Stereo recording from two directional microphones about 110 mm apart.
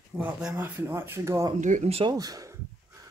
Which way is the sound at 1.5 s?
80° right.